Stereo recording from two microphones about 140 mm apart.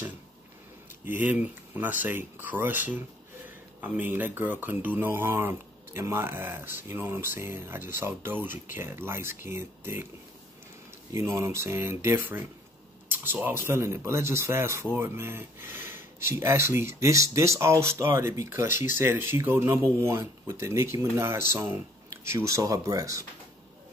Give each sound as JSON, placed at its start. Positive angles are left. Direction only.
{"t": 1.0, "sound": "speech", "side_deg": -15}
{"t": 11.1, "sound": "speech", "side_deg": -20}